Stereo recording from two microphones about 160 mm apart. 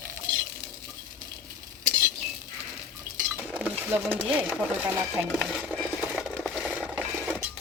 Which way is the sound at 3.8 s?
15° right (ahead or behind).